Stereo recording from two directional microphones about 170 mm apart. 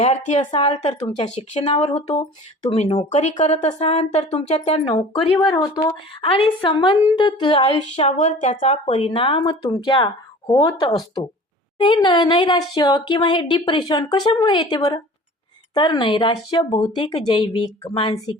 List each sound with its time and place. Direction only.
0.0 s a woman's voice: 45° left (ahead or behind)
6.2 s a woman's voice: 30° left (ahead or behind)
9.0 s speech: 30° left (ahead or behind)
14.8 s a woman's voice: 35° left (ahead or behind)
15.7 s speech: 25° left (ahead or behind)